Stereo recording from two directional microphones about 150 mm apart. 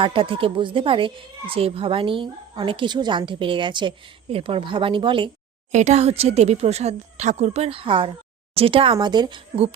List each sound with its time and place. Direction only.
0.0 s speech: 35° right (ahead or behind)
5.7 s speech: 50° right (ahead or behind); by 9.6 s 30° right (ahead or behind)